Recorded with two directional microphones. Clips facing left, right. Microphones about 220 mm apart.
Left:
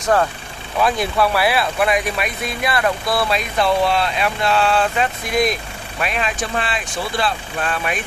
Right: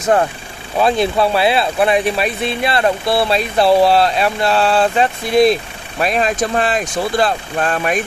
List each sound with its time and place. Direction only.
0.0 s speech: 25° right (ahead or behind); by 8.0 s 45° right (ahead or behind)